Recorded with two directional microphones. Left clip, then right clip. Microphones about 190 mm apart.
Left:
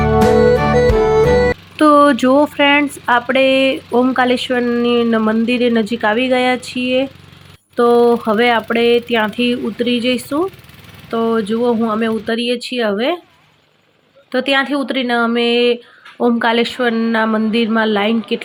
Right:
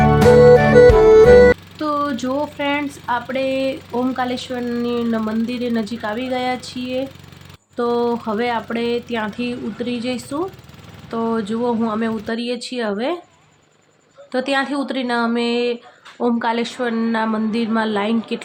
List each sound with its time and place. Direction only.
0.2 s music: centre (ahead or behind)
1.7 s speech: 30° left (ahead or behind)
14.3 s speech: 15° left (ahead or behind)